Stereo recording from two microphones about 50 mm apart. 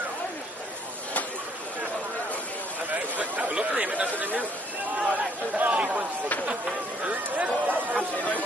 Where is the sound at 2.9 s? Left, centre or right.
Right.